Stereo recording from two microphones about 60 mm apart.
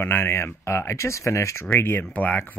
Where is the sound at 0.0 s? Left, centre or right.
Left.